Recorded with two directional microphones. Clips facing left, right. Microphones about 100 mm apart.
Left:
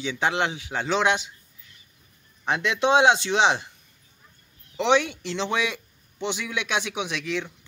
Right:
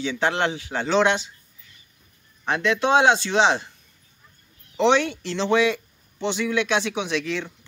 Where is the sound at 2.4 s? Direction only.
15° left (ahead or behind).